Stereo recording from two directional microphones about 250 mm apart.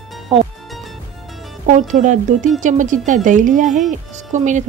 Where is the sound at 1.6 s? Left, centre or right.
Right.